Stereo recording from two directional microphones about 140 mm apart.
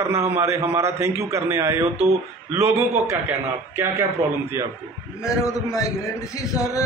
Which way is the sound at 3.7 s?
15° right (ahead or behind).